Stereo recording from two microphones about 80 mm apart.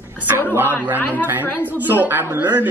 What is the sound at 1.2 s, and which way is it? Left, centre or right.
A man's voice, right.